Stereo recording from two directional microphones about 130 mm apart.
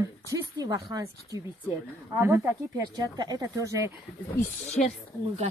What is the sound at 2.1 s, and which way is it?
Speech, 15° right (ahead or behind).